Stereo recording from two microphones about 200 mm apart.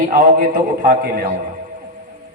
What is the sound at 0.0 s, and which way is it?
A man's voice, 45° right (ahead or behind).